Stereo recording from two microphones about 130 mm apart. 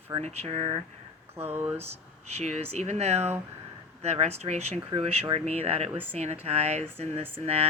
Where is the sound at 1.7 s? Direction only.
55° right (ahead or behind).